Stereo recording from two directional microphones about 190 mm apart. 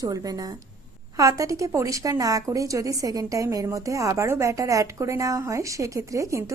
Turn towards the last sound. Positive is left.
turn(degrees=-15)  # may be behind; listen again after turning